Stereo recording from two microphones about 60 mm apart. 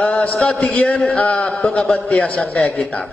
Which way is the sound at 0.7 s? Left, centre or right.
Left.